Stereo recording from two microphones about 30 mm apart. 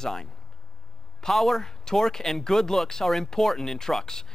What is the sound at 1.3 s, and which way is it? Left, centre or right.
Speech, centre.